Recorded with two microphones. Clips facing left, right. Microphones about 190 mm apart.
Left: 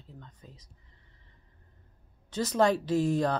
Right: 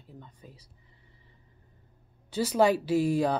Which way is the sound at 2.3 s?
10° right (ahead or behind).